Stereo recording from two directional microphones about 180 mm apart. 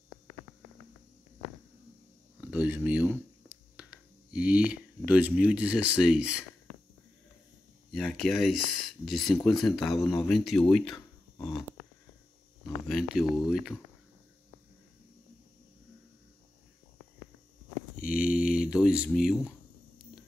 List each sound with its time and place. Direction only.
2.4 s speech: 10° right (ahead or behind)
7.9 s speech: centre (ahead or behind)
12.6 s speech: centre (ahead or behind)
18.0 s a sound: 55° left (ahead or behind)
18.7 s speech: 5° right (ahead or behind)